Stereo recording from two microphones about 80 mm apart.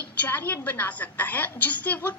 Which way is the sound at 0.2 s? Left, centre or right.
Left.